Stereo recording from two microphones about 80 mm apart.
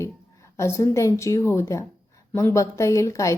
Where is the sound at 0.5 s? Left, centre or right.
Left.